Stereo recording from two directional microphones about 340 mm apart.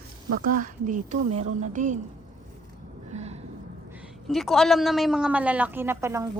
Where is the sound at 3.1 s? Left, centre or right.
Centre.